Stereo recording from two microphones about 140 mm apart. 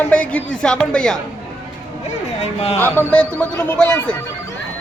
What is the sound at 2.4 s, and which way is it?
Speech, 45° left (ahead or behind).